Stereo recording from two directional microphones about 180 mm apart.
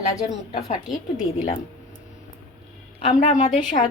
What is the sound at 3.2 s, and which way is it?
Speech, 40° left (ahead or behind).